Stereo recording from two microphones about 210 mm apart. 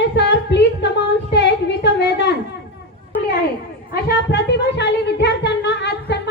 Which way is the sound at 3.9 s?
50° left (ahead or behind).